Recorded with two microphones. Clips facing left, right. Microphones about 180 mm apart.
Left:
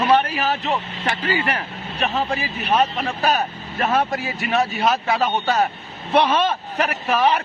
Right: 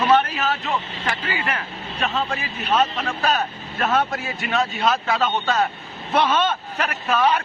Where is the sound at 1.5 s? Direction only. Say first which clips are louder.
Left 2 dB; 15° left (ahead or behind).